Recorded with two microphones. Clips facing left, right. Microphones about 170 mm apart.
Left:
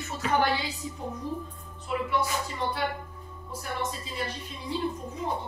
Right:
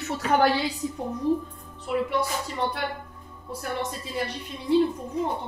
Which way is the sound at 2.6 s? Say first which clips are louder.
Right 4 dB; 70° right (ahead or behind).